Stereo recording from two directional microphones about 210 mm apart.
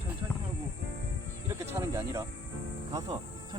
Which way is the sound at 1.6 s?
10° right (ahead or behind).